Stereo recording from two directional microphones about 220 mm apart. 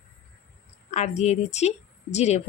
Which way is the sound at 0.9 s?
30° left (ahead or behind).